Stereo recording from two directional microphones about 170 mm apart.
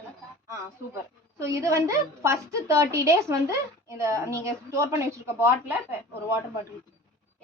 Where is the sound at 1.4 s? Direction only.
15° right (ahead or behind).